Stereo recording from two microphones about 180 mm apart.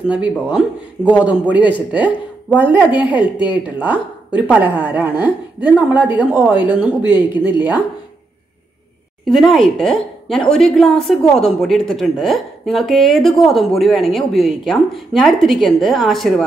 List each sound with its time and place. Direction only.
0.3 s a woman's voice: 5° right (ahead or behind)
4.3 s a woman's voice: 10° right (ahead or behind)
7.0 s speech: 25° left (ahead or behind)
9.2 s a woman's voice: centre (ahead or behind)